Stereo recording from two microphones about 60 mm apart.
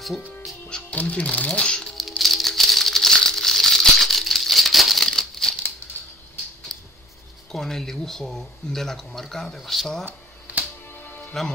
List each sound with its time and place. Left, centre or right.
0.7 s music: centre
0.9 s speech: left
2.0 s music: centre
6.7 s a sound: centre
7.5 s speech: centre
10.0 s a sound: right
11.0 s music: left